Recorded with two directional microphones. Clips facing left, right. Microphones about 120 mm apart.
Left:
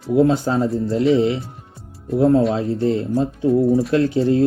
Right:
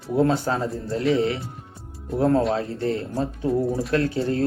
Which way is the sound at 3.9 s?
25° left (ahead or behind).